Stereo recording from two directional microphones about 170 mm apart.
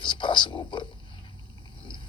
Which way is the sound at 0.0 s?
30° left (ahead or behind).